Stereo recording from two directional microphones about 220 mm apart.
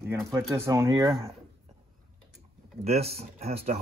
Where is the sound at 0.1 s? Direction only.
10° right (ahead or behind).